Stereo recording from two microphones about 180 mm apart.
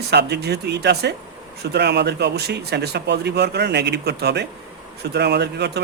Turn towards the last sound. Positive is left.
turn(degrees=-70)  # may be behind; listen again after turning